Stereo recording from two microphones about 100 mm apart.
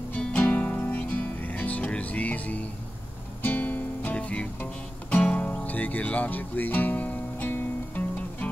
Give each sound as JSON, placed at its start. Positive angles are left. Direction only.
{"t": 0.4, "sound": "music", "side_deg": 15}